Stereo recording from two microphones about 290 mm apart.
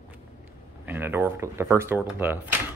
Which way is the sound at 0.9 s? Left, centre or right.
Centre.